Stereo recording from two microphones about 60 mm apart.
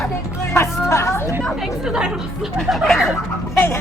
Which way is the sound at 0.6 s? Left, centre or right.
Left.